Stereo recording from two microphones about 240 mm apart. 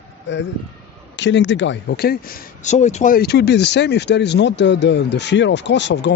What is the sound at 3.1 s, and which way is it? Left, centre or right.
Speech, left.